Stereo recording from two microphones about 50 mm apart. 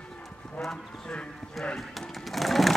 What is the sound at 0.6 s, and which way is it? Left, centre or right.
Speech, centre.